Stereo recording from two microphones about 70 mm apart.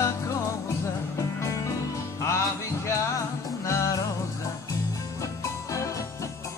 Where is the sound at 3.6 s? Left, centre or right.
Left.